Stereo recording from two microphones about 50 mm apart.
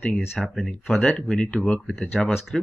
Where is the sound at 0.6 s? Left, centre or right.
Centre.